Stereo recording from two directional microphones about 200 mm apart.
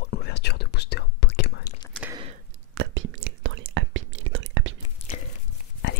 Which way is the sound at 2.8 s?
75° right (ahead or behind).